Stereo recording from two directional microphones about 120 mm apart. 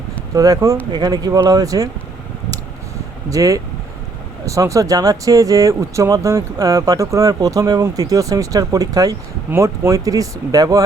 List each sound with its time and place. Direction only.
0.3 s speech: 30° right (ahead or behind)
3.2 s speech: 30° right (ahead or behind)